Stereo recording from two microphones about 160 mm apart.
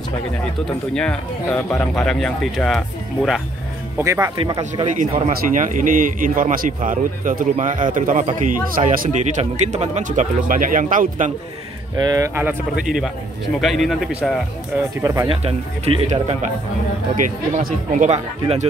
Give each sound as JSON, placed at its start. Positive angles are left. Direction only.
{"t": 0.7, "sound": "speech", "side_deg": 5}
{"t": 4.0, "sound": "speech", "side_deg": -20}
{"t": 4.4, "sound": "speech", "side_deg": -30}
{"t": 5.3, "sound": "a man's voice", "side_deg": -55}
{"t": 12.0, "sound": "speech", "side_deg": -20}
{"t": 13.6, "sound": "speech", "side_deg": 0}
{"t": 15.0, "sound": "speech", "side_deg": -20}
{"t": 15.2, "sound": "speech", "side_deg": -35}
{"t": 17.2, "sound": "speech", "side_deg": -60}